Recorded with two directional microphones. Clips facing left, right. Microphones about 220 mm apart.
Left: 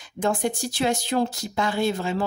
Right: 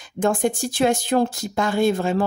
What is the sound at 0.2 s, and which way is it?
Speech, 50° right (ahead or behind).